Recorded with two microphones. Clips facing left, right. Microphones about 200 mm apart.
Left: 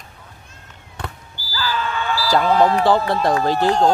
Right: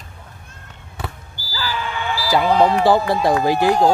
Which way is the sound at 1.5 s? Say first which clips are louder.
Left 2 dB; 15° right (ahead or behind).